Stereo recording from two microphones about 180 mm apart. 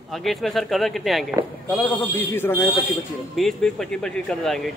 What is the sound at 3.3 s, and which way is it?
Speech, centre (ahead or behind).